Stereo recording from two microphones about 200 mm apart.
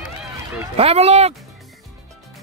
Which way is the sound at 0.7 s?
30° right (ahead or behind).